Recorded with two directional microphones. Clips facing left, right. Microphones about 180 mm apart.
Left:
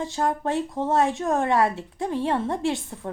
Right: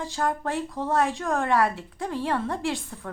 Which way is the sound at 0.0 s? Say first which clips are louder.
Left 2 dB; 25° left (ahead or behind).